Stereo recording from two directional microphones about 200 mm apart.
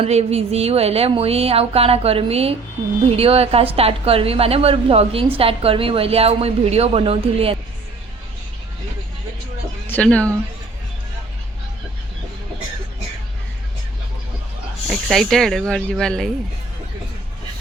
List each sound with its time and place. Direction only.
0.0 s a woman's voice: 30° right (ahead or behind)
9.8 s a woman's voice: 10° left (ahead or behind)
14.8 s speech: centre (ahead or behind)